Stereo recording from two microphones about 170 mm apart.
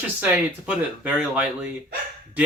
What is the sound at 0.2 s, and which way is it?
Speech, 10° right (ahead or behind).